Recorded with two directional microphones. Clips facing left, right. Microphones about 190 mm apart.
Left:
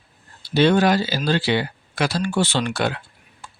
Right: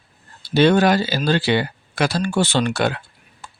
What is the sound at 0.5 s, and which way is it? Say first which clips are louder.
Speech: right 2 dB; 50° right (ahead or behind).